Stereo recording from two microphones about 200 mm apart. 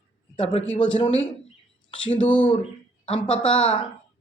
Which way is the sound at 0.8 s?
25° left (ahead or behind).